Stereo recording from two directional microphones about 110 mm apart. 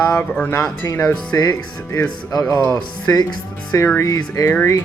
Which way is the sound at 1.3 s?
30° left (ahead or behind).